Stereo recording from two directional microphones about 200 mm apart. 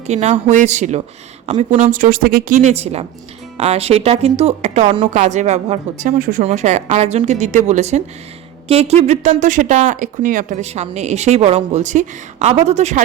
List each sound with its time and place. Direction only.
0.1 s speech: 35° right (ahead or behind)